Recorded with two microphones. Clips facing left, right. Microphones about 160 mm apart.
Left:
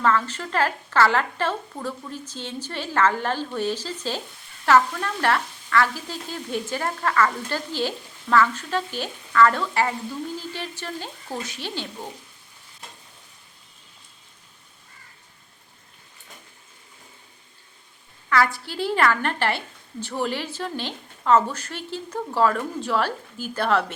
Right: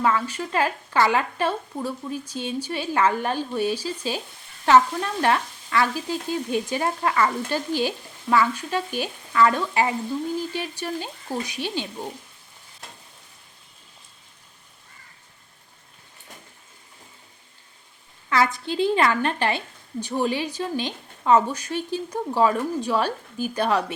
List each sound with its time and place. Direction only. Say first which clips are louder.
0.0 s a woman's voice: even; 10° right (ahead or behind)
18.3 s a woman's voice: even; 20° right (ahead or behind)